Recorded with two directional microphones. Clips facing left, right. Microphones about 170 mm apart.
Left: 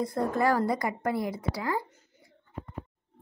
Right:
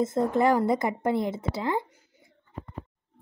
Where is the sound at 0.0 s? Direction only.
20° right (ahead or behind).